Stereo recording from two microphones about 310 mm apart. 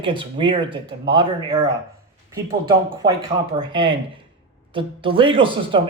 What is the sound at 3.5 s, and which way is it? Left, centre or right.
A man's voice, centre.